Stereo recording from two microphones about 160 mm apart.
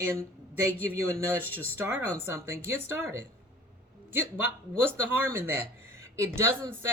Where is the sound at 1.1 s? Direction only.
15° right (ahead or behind).